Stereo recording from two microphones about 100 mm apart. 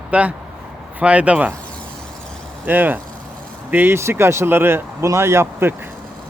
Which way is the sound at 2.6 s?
20° right (ahead or behind).